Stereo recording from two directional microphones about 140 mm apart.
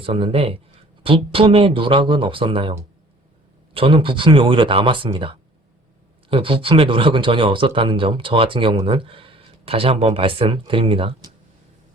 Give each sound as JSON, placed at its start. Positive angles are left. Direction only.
{"t": 0.0, "sound": "speech", "side_deg": -40}
{"t": 3.8, "sound": "speech", "side_deg": -40}